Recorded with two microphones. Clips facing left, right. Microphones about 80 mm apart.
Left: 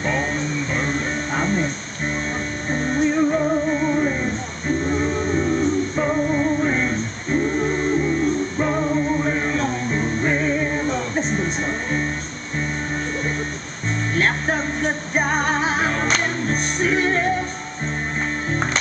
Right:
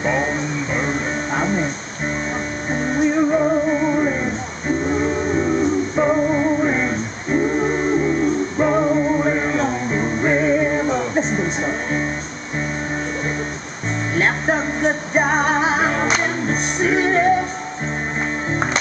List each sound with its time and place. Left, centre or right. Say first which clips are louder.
0.0 s music: right 3 dB; centre
2.7 s music: right 2 dB; centre
14.1 s music: right 3 dB; centre